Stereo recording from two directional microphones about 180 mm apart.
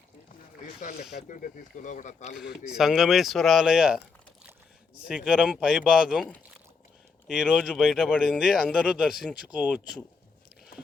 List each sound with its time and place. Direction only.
0.8 s speech: 45° left (ahead or behind)
2.6 s speech: 5° right (ahead or behind)
5.0 s speech: 5° right (ahead or behind)
7.3 s speech: 5° right (ahead or behind)